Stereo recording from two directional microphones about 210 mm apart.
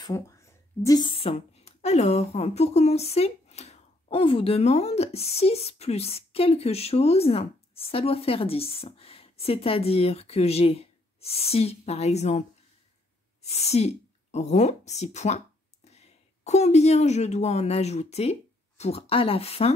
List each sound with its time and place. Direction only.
0.0 s a woman's voice: 15° left (ahead or behind)